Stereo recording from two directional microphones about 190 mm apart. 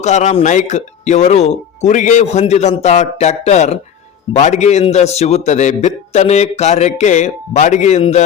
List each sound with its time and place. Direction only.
0.0 s a man's voice: 40° left (ahead or behind)